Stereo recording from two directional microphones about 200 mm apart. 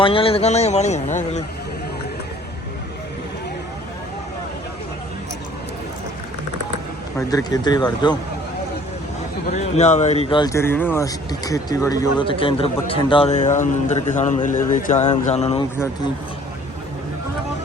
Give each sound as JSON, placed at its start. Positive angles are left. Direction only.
{"t": 0.0, "sound": "a man's voice", "side_deg": 25}
{"t": 7.2, "sound": "speech", "side_deg": 15}
{"t": 9.5, "sound": "a man's voice", "side_deg": 35}